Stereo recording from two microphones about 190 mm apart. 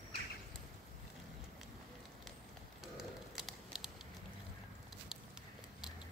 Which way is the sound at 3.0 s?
Centre (ahead or behind).